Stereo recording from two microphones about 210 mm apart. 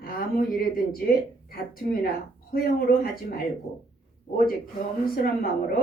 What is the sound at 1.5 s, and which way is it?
A woman's voice, 45° left (ahead or behind).